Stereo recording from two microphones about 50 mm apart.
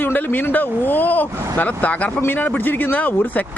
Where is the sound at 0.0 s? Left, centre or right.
Left.